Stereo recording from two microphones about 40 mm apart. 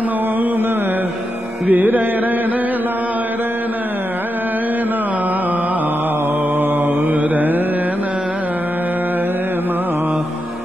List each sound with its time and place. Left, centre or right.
1.7 s music: right
7.3 s mantra: right